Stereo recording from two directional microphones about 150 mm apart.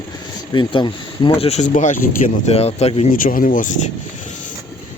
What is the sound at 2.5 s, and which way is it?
Speech, 45° left (ahead or behind).